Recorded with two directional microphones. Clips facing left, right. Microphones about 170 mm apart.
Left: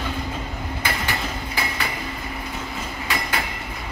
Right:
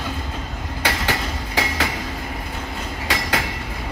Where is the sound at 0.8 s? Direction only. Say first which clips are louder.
Right 4 dB; 90° right.